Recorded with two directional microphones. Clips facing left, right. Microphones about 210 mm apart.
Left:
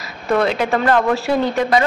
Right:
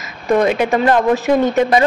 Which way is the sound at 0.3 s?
15° right (ahead or behind).